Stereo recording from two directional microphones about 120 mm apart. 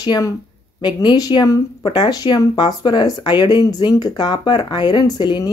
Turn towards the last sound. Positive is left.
turn(degrees=35)  # may be behind; listen again after turning